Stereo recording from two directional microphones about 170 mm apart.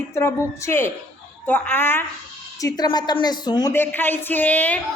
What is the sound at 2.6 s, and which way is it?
A woman's voice, 25° left (ahead or behind).